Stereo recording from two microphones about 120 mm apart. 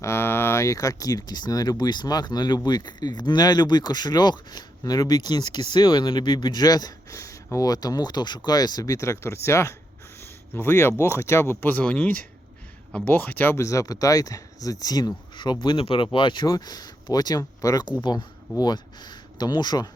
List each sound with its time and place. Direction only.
0.0 s speech: 20° left (ahead or behind)